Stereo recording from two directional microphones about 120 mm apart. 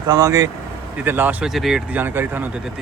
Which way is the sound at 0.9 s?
15° right (ahead or behind).